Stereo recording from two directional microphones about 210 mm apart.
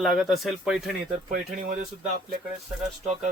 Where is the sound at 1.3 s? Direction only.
40° right (ahead or behind).